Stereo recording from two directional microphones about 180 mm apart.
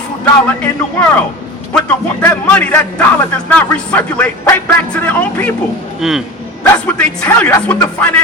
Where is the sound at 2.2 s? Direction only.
10° left (ahead or behind).